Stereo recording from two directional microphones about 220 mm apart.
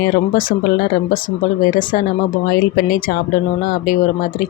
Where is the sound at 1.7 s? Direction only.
40° left (ahead or behind).